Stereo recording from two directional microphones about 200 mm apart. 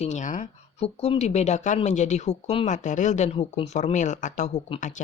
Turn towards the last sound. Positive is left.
turn(degrees=40)  # may be behind; listen again after turning